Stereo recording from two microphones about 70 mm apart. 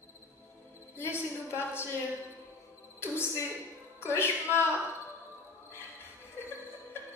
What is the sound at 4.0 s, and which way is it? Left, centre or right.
Music, left.